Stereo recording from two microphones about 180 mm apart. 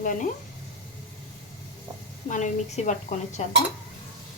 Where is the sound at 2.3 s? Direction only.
40° left (ahead or behind).